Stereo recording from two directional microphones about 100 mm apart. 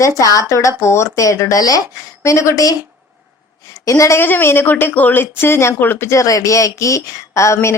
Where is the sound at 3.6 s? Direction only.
35° left (ahead or behind).